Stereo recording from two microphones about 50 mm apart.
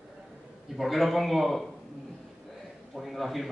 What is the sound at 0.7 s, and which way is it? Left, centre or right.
Speech, centre.